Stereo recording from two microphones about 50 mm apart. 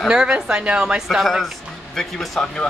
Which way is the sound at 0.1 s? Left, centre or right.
Centre.